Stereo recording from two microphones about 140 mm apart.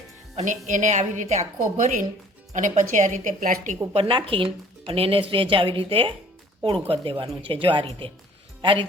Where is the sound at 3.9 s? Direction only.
40° right (ahead or behind).